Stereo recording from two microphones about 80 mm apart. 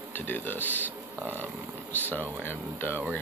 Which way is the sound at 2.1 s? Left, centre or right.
Left.